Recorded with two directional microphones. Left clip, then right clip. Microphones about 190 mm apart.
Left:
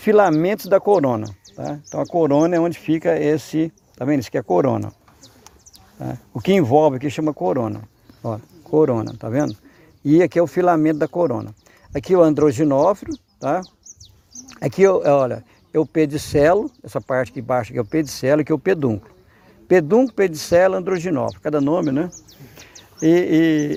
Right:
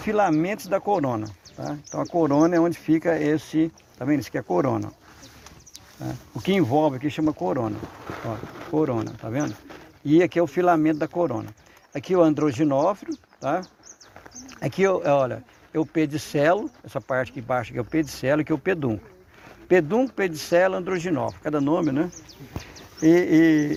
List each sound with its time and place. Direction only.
0.0 s speech: 60° left (ahead or behind); by 4.9 s 45° left (ahead or behind)
6.0 s speech: 45° left (ahead or behind)
10.1 s speech: 60° left (ahead or behind)